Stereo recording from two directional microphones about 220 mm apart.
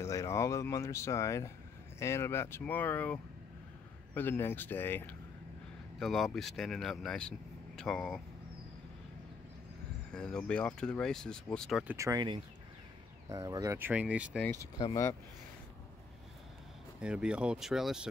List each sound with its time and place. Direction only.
0.0 s speech: 15° left (ahead or behind)
10.1 s speech: 5° left (ahead or behind)
12.0 s speech: 15° right (ahead or behind)
14.4 s speech: 15° left (ahead or behind)
17.0 s speech: 5° right (ahead or behind)